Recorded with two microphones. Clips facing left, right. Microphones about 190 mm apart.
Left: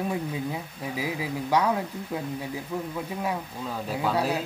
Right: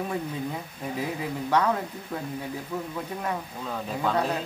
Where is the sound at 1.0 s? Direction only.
5° left (ahead or behind).